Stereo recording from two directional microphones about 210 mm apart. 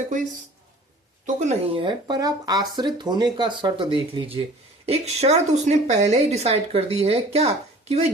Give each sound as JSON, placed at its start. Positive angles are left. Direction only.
{"t": 1.4, "sound": "a woman's voice", "side_deg": -30}